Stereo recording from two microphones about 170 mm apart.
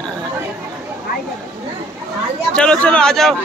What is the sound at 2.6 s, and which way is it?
Speech, 5° left (ahead or behind).